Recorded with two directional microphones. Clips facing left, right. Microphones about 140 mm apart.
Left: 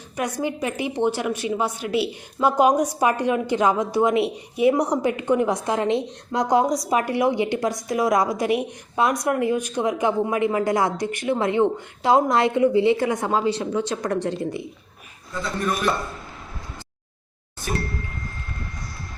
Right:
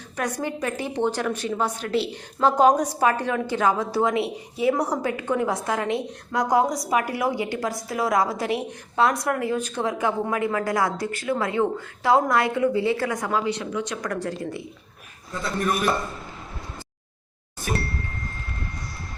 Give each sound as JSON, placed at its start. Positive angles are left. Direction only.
{"t": 0.2, "sound": "a woman's voice", "side_deg": 10}